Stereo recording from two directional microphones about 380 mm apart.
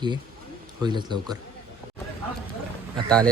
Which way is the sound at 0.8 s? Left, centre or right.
Centre.